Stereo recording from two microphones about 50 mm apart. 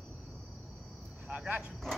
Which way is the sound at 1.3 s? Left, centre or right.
Right.